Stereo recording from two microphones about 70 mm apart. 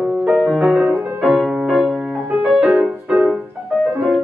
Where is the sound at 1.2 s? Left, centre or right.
Centre.